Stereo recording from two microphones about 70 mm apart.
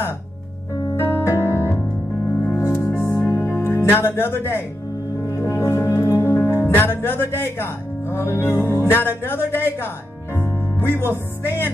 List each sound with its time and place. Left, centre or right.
0.9 s music: left
5.3 s music: left
6.7 s speech: left
10.3 s music: left